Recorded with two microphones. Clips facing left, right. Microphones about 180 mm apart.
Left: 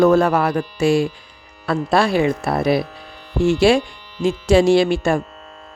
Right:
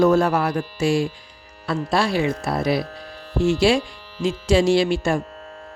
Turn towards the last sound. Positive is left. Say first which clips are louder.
# left 3 dB
turn(degrees=55)  # may be behind; listen again after turning